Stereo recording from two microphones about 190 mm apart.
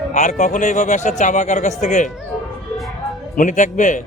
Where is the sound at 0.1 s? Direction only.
40° left (ahead or behind).